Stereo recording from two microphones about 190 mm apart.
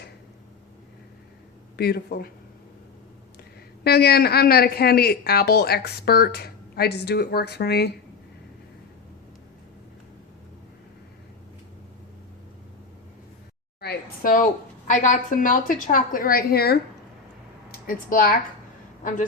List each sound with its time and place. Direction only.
1.7 s a woman's voice: 55° left (ahead or behind)
3.8 s a woman's voice: 55° left (ahead or behind)
13.8 s a woman's voice: 55° left (ahead or behind)